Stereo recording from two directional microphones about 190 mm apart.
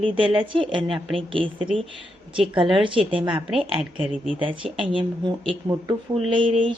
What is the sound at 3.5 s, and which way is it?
Speech, 5° right (ahead or behind).